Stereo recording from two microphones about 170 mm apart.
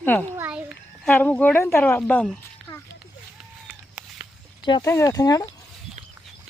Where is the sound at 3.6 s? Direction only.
5° right (ahead or behind).